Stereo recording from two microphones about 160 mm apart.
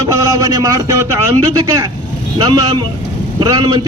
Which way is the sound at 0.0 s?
20° right (ahead or behind).